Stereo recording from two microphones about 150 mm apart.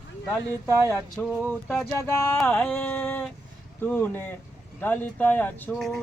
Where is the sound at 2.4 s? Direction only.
5° left (ahead or behind).